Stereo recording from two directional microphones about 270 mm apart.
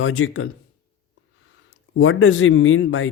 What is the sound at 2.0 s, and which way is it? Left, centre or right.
Speech, left.